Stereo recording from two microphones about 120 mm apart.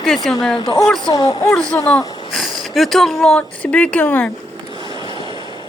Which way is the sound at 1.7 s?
5° left (ahead or behind).